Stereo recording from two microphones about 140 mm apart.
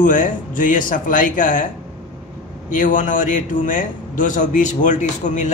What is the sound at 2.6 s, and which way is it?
A man's voice, 70° left (ahead or behind).